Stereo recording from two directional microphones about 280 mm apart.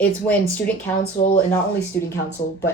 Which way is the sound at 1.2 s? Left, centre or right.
Left.